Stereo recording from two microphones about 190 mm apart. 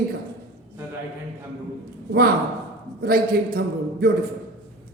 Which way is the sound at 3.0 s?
55° right (ahead or behind).